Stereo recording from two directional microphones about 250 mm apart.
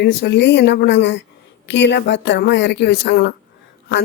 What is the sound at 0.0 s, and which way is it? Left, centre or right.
A woman's voice, left.